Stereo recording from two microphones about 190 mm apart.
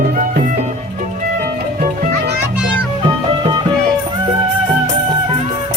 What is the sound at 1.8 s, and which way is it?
Music, 50° right (ahead or behind).